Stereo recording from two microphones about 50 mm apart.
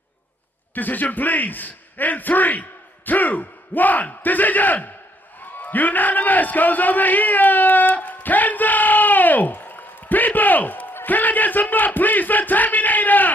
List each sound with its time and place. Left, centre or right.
0.7 s a man's voice: left